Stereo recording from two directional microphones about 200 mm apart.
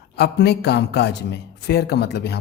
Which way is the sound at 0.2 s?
55° left (ahead or behind).